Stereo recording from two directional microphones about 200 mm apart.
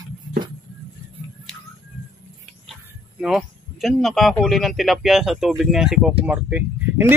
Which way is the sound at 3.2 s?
Centre (ahead or behind).